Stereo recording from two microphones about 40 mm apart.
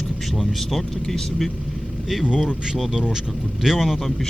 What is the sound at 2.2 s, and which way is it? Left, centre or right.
Speech, centre.